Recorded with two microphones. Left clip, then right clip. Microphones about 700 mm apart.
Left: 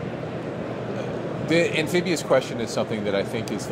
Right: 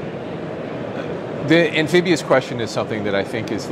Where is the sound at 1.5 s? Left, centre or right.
Right.